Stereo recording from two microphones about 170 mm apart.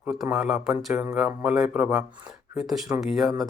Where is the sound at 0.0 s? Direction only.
5° right (ahead or behind).